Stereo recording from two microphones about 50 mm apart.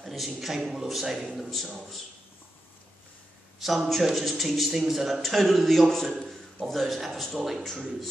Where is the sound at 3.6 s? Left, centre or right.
Centre.